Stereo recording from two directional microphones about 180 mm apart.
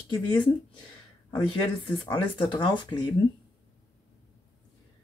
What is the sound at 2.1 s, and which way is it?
Speech, 25° left (ahead or behind).